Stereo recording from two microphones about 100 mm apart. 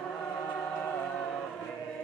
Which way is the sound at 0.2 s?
20° left (ahead or behind).